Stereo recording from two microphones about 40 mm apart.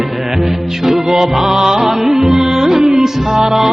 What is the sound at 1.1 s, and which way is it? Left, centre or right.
Music, centre.